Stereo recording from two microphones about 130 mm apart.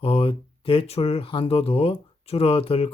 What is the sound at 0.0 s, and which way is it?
Speech, 45° left (ahead or behind).